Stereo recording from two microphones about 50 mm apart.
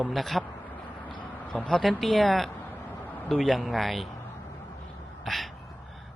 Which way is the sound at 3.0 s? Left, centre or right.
Left.